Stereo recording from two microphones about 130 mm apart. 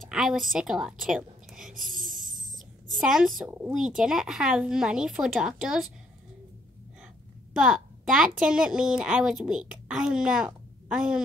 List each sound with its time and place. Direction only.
0.1 s a woman's voice: 5° right (ahead or behind)
7.5 s a woman's voice: 5° right (ahead or behind)